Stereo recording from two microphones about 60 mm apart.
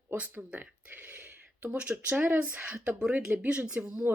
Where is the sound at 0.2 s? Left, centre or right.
Right.